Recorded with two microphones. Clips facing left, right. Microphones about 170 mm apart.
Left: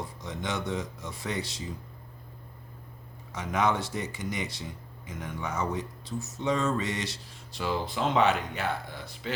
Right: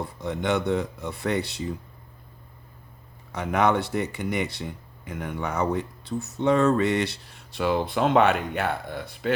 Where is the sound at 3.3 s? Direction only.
60° right (ahead or behind).